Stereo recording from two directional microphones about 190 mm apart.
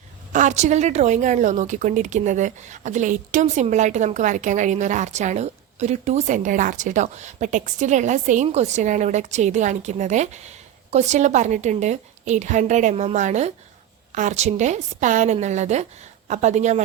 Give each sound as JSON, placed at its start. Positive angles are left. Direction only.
{"t": 0.3, "sound": "a woman's voice", "side_deg": -40}